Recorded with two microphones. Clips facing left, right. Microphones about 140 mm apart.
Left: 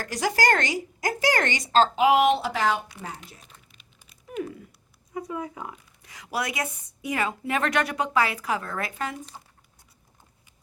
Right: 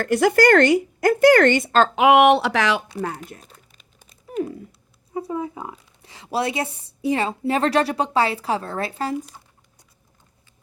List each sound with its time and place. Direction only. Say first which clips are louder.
0.0 s speech: right 9 dB; 60° right (ahead or behind); by 2.8 s 85° right
3.0 s speech: right 10 dB; 55° right (ahead or behind)
3.4 s crumpling: right 4 dB; 40° right (ahead or behind)
4.1 s a sound: right 6 dB; 30° right (ahead or behind)
5.1 s speech: right 5 dB; 30° right (ahead or behind)